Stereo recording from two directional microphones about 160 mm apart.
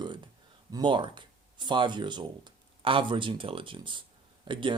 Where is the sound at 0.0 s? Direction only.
30° right (ahead or behind).